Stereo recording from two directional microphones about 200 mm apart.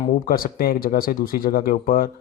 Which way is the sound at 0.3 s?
45° left (ahead or behind).